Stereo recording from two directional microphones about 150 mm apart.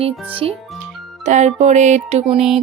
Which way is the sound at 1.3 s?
50° right (ahead or behind).